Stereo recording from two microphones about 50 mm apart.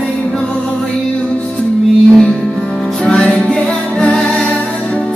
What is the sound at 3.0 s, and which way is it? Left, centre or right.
Music, centre.